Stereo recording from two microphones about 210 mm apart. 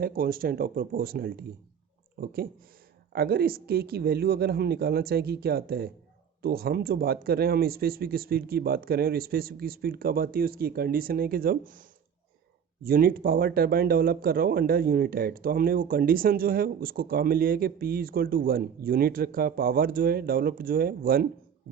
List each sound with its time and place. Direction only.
0.0 s speech: 45° right (ahead or behind)